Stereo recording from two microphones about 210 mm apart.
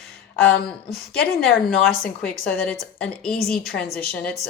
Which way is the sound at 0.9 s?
Centre (ahead or behind).